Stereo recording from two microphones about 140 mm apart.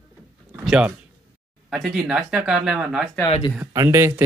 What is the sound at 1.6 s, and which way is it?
Speech, centre (ahead or behind).